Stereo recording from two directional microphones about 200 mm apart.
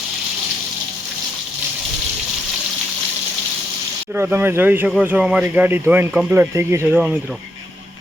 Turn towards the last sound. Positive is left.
turn(degrees=-10)  # may be behind; listen again after turning